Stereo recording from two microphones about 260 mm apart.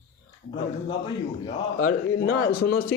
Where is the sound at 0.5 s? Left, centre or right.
Centre.